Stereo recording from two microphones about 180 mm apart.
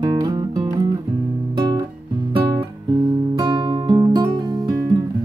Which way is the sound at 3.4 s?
25° right (ahead or behind).